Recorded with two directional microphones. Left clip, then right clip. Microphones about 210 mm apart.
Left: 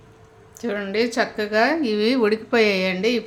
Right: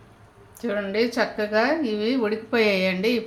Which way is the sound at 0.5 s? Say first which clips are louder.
Left 1 dB; 10° left (ahead or behind).